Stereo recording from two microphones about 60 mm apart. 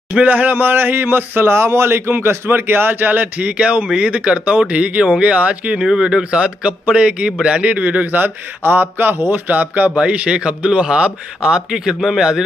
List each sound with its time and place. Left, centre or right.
0.1 s a man's voice: right